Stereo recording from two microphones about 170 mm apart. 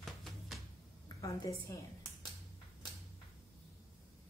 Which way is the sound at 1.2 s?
20° left (ahead or behind).